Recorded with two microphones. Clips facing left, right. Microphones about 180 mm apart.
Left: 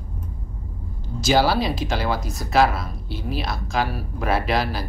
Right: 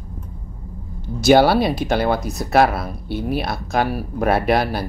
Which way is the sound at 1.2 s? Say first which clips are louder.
Right 6 dB; 60° right (ahead or behind).